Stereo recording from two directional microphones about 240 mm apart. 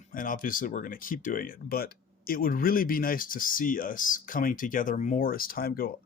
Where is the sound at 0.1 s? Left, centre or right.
Left.